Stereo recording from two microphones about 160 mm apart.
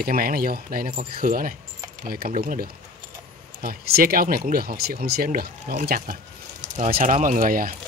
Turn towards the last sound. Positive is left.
turn(degrees=-60)  # may be behind; listen again after turning